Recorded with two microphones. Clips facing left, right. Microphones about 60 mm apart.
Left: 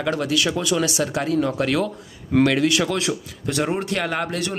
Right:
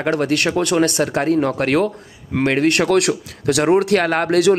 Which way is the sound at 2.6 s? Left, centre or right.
Right.